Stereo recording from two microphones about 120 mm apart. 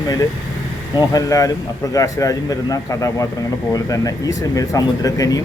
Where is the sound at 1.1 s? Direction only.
30° left (ahead or behind).